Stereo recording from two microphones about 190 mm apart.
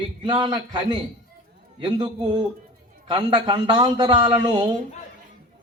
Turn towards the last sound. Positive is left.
turn(degrees=-25)  # may be behind; listen again after turning